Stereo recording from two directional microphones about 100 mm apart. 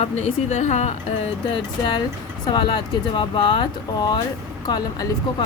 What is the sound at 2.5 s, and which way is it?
A woman's voice, 45° left (ahead or behind).